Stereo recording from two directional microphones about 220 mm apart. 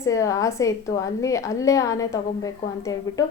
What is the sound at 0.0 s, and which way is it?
Speech, 15° left (ahead or behind).